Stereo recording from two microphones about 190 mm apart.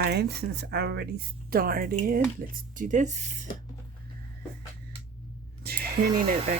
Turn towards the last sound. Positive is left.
turn(degrees=-30)  # may be behind; listen again after turning